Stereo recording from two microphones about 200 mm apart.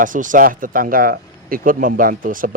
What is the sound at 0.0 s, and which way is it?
Speech, 40° right (ahead or behind).